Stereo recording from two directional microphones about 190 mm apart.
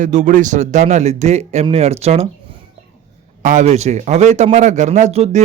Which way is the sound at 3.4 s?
40° right (ahead or behind).